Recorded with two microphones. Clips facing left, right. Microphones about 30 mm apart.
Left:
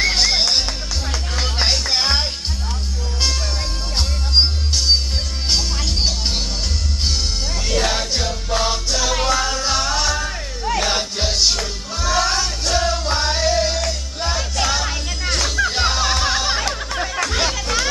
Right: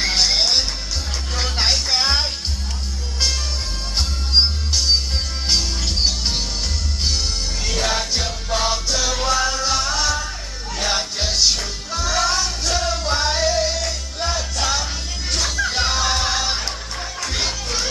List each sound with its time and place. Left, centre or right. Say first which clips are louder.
0.0 s music: left 1 dB; centre
4.4 s music: even; centre
7.6 s music: left 2 dB; centre
17.2 s music: left 1 dB; left